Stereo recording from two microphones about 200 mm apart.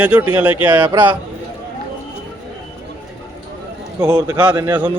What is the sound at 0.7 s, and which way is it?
Speech, 20° right (ahead or behind).